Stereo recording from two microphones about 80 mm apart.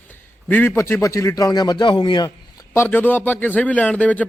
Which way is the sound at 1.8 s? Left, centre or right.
Left.